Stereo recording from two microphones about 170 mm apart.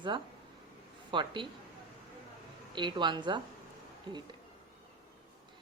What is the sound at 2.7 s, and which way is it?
A woman's voice, 25° right (ahead or behind).